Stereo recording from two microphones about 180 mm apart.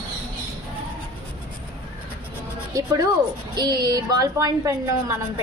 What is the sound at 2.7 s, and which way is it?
A woman's voice, 20° right (ahead or behind).